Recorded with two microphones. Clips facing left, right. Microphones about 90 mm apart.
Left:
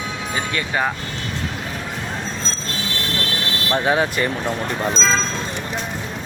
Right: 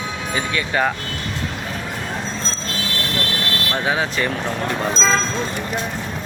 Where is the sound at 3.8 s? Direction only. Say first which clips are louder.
Left 2 dB; centre (ahead or behind).